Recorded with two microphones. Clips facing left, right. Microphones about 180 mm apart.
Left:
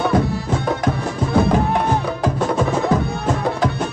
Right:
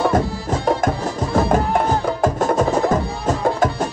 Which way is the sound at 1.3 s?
45° right (ahead or behind).